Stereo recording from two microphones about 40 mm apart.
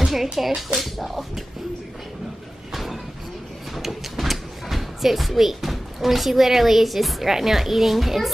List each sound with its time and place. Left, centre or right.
0.0 s a child's voice: centre
2.7 s a sound: centre
3.7 s speech: centre